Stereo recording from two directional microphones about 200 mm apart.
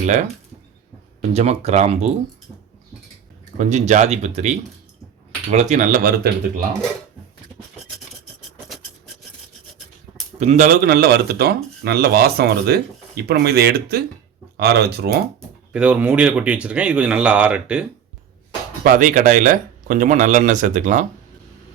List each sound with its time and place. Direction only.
1.3 s speech: 30° right (ahead or behind)
3.6 s speech: 35° right (ahead or behind)
10.4 s speech: 35° right (ahead or behind); by 15.2 s 55° right (ahead or behind)
15.7 s speech: 5° right (ahead or behind)
18.8 s speech: 45° right (ahead or behind)